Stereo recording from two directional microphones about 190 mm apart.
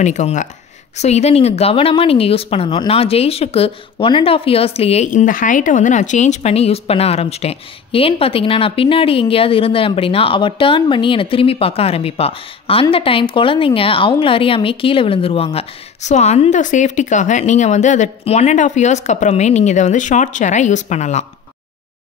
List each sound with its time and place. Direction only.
0.0 s speech: 40° left (ahead or behind)